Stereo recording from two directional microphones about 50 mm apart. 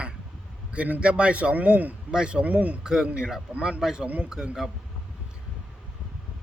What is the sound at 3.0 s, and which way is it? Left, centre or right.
A man's voice, centre.